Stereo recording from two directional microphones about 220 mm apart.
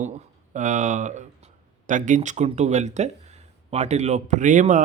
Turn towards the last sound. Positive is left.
turn(degrees=-35)  # may be behind; listen again after turning